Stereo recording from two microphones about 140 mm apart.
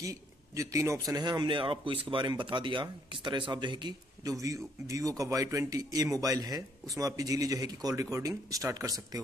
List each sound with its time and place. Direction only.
0.0 s a man's voice: 20° right (ahead or behind)